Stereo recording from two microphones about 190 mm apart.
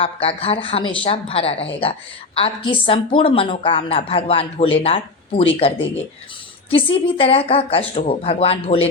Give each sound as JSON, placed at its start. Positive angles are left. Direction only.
{"t": 0.0, "sound": "a woman's voice", "side_deg": 30}